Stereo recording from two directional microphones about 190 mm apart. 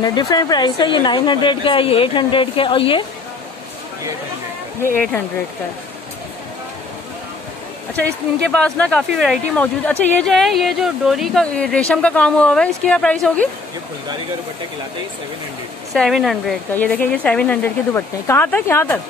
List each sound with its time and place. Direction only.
0.0 s a woman's voice: 20° left (ahead or behind)
8.5 s speech: 5° left (ahead or behind)
15.9 s speech: centre (ahead or behind)